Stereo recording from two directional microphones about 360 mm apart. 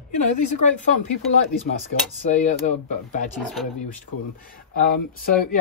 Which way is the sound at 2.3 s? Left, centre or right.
Centre.